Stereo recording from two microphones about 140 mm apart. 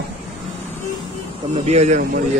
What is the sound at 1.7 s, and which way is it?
Speech, 55° right (ahead or behind).